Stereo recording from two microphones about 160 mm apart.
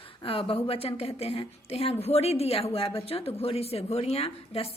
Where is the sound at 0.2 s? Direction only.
35° left (ahead or behind).